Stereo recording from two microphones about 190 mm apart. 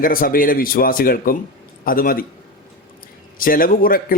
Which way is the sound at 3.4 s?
50° left (ahead or behind).